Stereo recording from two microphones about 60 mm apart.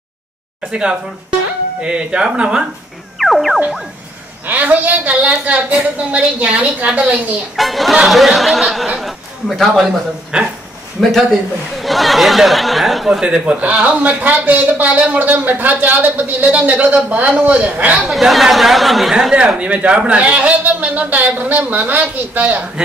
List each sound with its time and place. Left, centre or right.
0.7 s speech: centre
3.2 s music: centre
4.5 s speech: right
7.5 s a man's voice: centre
10.3 s speech: centre
11.0 s speech: centre
13.2 s speech: centre
17.9 s speech: centre
19.3 s speech: centre